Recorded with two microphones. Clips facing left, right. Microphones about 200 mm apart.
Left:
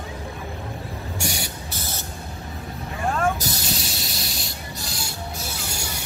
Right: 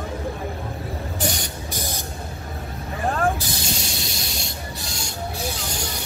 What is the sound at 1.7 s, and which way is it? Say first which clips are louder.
Vehicle: right 5 dB; 15° right (ahead or behind).